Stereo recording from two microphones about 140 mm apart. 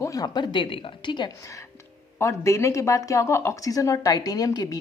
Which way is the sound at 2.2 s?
20° left (ahead or behind).